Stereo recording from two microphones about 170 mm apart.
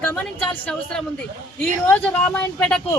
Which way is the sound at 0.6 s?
5° left (ahead or behind).